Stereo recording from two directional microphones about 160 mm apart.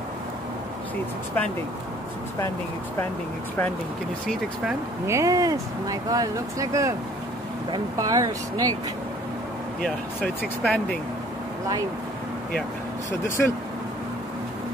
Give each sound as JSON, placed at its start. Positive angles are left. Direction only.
{"t": 5.0, "sound": "speech", "side_deg": -20}
{"t": 9.8, "sound": "speech", "side_deg": 5}
{"t": 13.4, "sound": "speech", "side_deg": 5}